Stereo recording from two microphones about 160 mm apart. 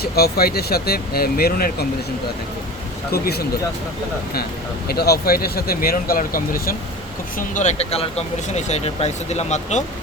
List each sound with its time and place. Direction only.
0.0 s speech: 75° left (ahead or behind)
3.1 s speech: 80° left
4.9 s speech: 80° left; by 6.7 s 60° left (ahead or behind)
7.3 s speech: 50° left (ahead or behind)